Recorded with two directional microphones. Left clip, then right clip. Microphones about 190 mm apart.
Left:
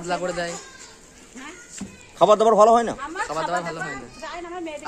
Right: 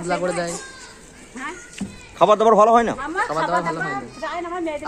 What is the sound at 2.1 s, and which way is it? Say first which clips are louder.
Speech: right 1 dB; 10° left (ahead or behind).